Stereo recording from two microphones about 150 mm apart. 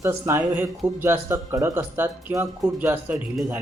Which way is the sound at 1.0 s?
15° right (ahead or behind).